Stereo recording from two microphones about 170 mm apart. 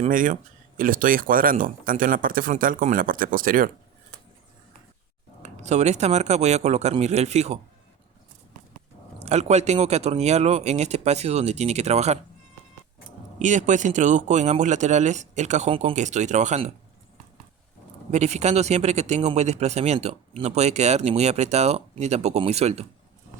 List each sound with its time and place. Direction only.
0.1 s speech: 50° right (ahead or behind)
5.4 s speech: 40° right (ahead or behind)
9.2 s speech: 40° right (ahead or behind)
13.4 s speech: 45° right (ahead or behind)
18.1 s speech: 40° right (ahead or behind)